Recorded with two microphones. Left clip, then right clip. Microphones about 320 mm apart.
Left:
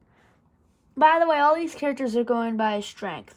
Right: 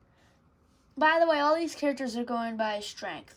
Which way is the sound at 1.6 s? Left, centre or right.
Centre.